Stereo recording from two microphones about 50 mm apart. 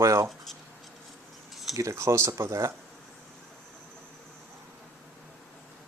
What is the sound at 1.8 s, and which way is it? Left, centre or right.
Speech, right.